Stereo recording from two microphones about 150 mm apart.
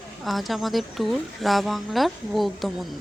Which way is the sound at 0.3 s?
Centre (ahead or behind).